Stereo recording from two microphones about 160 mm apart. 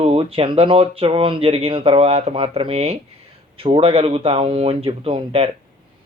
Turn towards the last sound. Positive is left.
turn(degrees=-35)  # may be behind; listen again after turning